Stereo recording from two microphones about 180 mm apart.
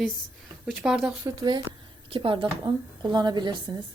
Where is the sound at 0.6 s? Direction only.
Centre (ahead or behind).